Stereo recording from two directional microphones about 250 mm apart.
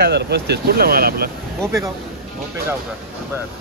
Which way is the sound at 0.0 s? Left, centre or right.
Right.